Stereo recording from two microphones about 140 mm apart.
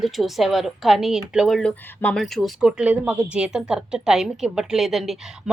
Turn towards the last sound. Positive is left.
turn(degrees=0)  # may be behind; listen again after turning